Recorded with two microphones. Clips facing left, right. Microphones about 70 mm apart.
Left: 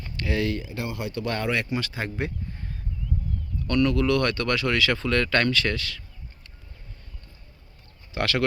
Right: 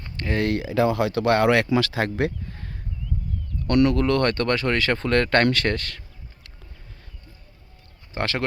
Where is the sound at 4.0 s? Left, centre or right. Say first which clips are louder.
Right 2 dB; right.